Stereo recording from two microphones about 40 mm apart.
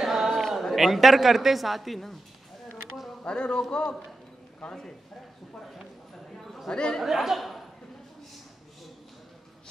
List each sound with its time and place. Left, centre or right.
0.0 s a sound: centre
0.7 s speech: centre
3.3 s a man's voice: left
4.6 s a man's voice: left
6.3 s a sound: centre
6.7 s a man's voice: centre
7.0 s speech: centre